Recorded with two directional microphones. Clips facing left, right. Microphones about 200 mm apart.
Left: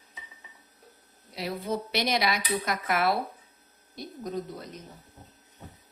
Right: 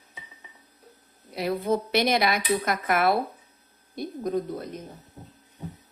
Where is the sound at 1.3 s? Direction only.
55° right (ahead or behind).